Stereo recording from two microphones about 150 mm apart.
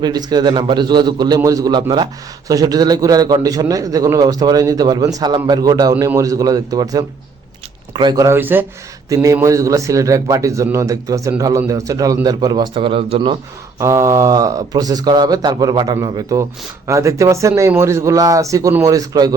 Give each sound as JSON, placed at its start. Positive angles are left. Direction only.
{"t": 0.0, "sound": "speech", "side_deg": -30}
{"t": 9.0, "sound": "speech", "side_deg": -25}
{"t": 13.7, "sound": "speech", "side_deg": -20}